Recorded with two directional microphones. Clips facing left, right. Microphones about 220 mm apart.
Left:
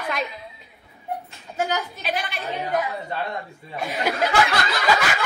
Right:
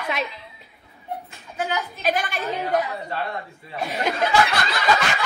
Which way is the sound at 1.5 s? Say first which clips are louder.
Left 2 dB; 40° left (ahead or behind).